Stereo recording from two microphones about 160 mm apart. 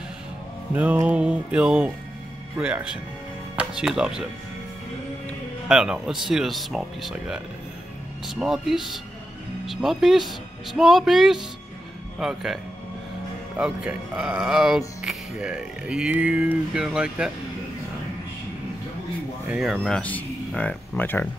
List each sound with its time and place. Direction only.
0.7 s music: 10° right (ahead or behind)
3.5 s speech: 5° right (ahead or behind)
5.7 s speech: 5° right (ahead or behind)
13.6 s speech: 5° right (ahead or behind)
19.5 s speech: centre (ahead or behind)